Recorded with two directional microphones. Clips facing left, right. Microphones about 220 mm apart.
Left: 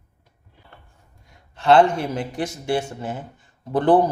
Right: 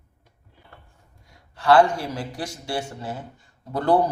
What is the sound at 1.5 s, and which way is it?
A man's voice, 25° left (ahead or behind).